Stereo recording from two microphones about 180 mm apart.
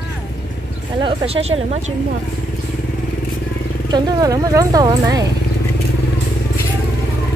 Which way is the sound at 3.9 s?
20° right (ahead or behind).